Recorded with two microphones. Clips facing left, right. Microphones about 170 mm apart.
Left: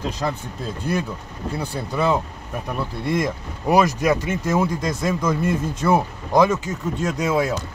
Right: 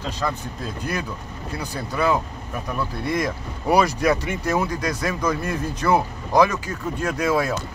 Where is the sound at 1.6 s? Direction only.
25° left (ahead or behind).